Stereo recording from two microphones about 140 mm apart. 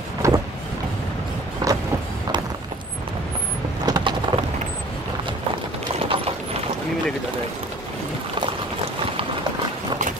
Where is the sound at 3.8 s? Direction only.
30° right (ahead or behind).